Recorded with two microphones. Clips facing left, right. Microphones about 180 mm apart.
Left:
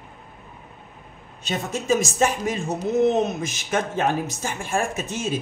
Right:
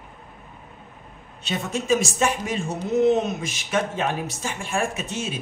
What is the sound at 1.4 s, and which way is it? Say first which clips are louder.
A woman's voice: even; 45° left (ahead or behind).